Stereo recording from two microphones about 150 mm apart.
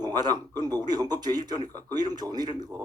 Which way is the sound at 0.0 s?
30° right (ahead or behind).